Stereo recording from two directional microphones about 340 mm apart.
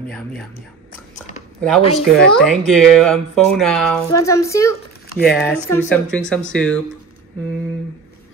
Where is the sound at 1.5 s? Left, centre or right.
Centre.